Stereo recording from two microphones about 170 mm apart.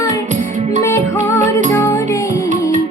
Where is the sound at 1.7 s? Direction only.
15° left (ahead or behind).